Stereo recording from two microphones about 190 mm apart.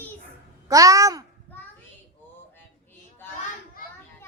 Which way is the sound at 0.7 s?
15° right (ahead or behind).